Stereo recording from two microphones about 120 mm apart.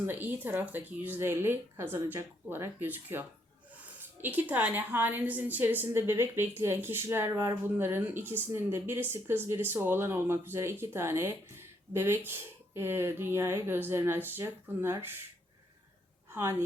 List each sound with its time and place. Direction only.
0.0 s a woman's voice: 15° right (ahead or behind)
16.3 s speech: 20° right (ahead or behind)